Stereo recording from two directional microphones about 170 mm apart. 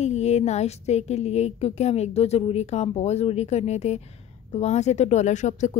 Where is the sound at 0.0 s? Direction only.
40° left (ahead or behind).